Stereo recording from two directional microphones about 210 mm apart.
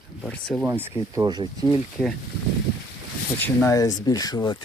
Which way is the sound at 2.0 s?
5° left (ahead or behind).